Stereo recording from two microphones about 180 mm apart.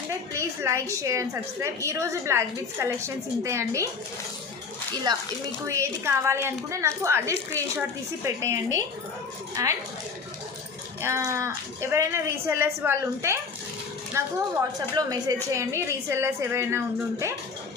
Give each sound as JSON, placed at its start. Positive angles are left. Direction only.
{"t": 0.1, "sound": "a woman's voice", "side_deg": -15}
{"t": 5.1, "sound": "a woman's voice", "side_deg": -20}
{"t": 11.0, "sound": "a woman's voice", "side_deg": -15}